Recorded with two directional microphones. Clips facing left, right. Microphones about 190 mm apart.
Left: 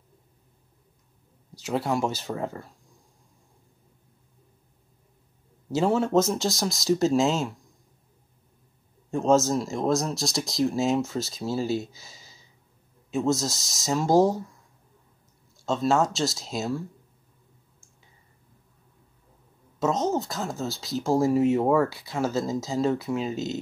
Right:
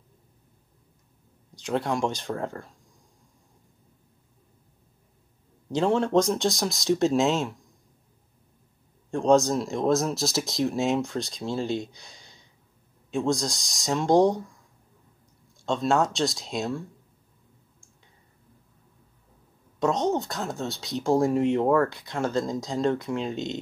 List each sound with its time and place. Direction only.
1.5 s speech: 5° left (ahead or behind)
5.7 s speech: 5° left (ahead or behind)
9.1 s speech: 5° left (ahead or behind)
15.5 s speech: 5° left (ahead or behind)
19.8 s speech: centre (ahead or behind)